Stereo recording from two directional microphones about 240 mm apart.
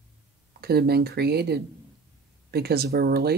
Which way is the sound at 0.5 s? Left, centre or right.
Right.